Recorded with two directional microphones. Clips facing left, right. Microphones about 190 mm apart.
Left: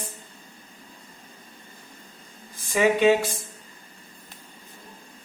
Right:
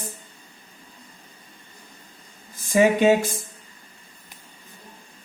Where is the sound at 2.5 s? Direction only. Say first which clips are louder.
Right 3 dB; 45° right (ahead or behind).